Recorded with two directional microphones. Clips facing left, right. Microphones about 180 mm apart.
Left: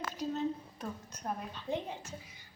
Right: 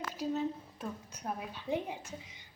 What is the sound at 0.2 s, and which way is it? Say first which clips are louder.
A woman's voice: right 1 dB; 5° right (ahead or behind).